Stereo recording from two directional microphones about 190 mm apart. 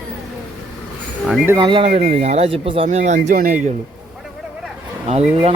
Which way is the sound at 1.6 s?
25° right (ahead or behind).